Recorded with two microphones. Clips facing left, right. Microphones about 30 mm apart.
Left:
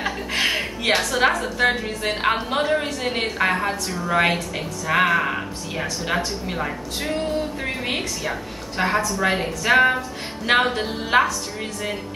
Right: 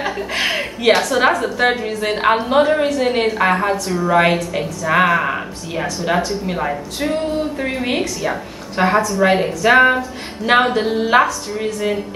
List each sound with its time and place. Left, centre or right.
0.0 s a woman's voice: centre